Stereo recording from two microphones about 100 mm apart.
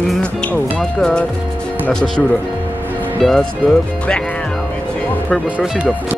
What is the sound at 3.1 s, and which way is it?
Speech, centre (ahead or behind).